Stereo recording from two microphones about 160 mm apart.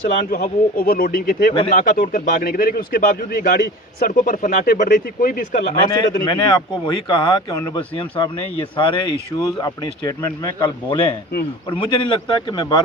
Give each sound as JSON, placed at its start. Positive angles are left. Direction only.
{"t": 0.3, "sound": "speech", "side_deg": 55}
{"t": 5.7, "sound": "speech", "side_deg": 30}